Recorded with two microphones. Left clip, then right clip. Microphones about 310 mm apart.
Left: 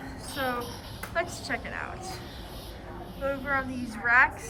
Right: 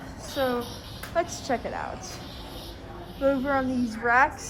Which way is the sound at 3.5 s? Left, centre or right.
Centre.